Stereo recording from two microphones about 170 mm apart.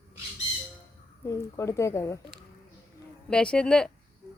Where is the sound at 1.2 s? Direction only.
15° left (ahead or behind).